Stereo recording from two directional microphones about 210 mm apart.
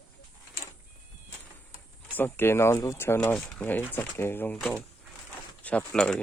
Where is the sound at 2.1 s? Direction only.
10° left (ahead or behind).